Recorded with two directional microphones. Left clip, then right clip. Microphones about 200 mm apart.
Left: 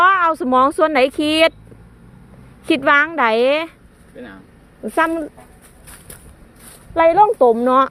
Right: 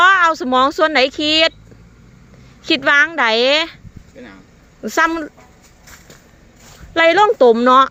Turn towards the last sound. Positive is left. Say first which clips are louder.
# right 2 dB
turn(degrees=-20)  # may be behind; listen again after turning